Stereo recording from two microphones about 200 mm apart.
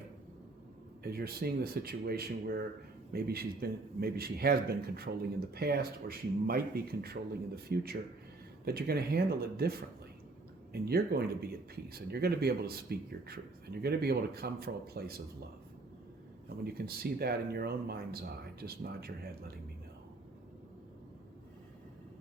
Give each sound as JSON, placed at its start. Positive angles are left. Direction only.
{"t": 1.0, "sound": "speech", "side_deg": -50}
{"t": 16.6, "sound": "speech", "side_deg": -50}